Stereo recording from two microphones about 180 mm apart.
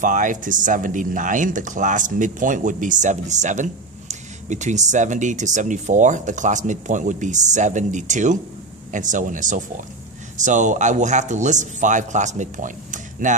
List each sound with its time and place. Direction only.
0.0 s speech: 45° right (ahead or behind)